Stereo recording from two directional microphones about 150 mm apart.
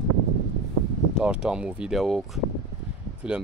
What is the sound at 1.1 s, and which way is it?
Speech, 5° right (ahead or behind).